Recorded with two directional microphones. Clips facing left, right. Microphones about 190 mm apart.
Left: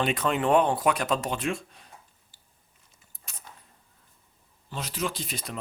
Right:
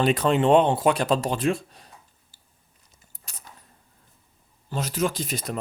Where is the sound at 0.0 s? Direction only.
35° right (ahead or behind).